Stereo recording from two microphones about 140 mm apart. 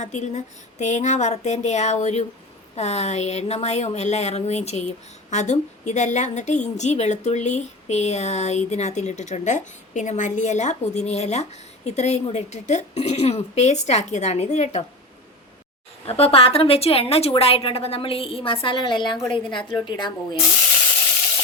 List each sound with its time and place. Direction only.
0.0 s a woman's voice: 60° left (ahead or behind)
16.0 s a woman's voice: 45° left (ahead or behind)